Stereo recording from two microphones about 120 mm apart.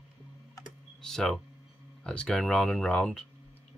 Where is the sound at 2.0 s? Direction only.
10° left (ahead or behind).